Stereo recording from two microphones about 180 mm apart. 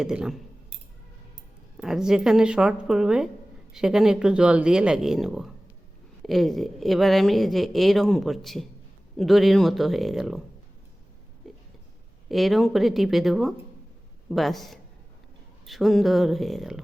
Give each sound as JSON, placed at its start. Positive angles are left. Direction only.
{"t": 0.0, "sound": "speech", "side_deg": -5}
{"t": 1.8, "sound": "speech", "side_deg": -5}
{"t": 12.3, "sound": "speech", "side_deg": 0}